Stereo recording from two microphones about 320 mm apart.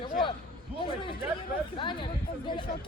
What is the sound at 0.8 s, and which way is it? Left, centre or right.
A man's voice, centre.